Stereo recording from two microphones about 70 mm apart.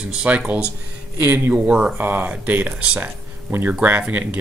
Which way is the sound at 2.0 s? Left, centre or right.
Right.